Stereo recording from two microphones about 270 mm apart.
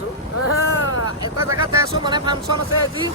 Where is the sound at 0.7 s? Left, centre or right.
Left.